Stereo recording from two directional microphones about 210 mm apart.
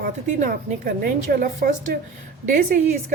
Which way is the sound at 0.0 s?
40° right (ahead or behind).